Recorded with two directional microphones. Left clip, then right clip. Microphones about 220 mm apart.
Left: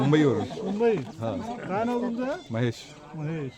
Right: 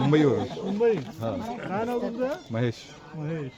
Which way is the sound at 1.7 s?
50° left (ahead or behind).